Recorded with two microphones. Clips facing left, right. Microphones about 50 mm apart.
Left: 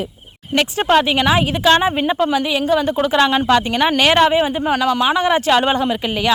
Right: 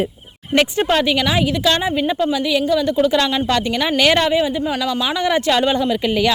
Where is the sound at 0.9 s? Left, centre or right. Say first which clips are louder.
Left 3 dB; centre.